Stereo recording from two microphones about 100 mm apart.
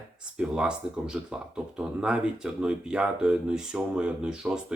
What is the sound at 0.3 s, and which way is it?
Speech, 10° right (ahead or behind).